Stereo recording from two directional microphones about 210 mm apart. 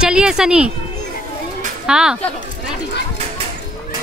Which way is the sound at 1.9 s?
5° right (ahead or behind).